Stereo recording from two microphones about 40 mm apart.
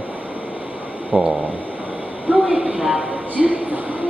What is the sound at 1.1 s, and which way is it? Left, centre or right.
Speech, right.